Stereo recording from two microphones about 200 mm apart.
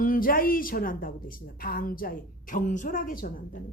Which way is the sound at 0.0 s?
45° left (ahead or behind).